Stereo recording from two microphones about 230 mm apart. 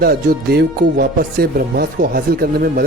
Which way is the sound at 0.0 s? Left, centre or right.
Right.